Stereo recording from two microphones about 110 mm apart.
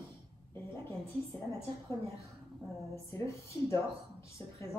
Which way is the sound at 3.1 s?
25° left (ahead or behind).